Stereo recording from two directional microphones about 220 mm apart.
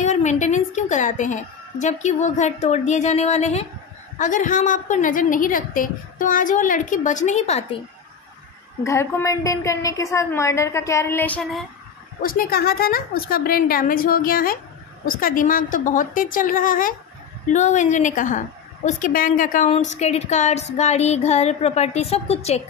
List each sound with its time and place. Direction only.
0.0 s a woman's voice: 30° left (ahead or behind)
8.8 s a woman's voice: 15° left (ahead or behind)
12.2 s a woman's voice: 40° left (ahead or behind)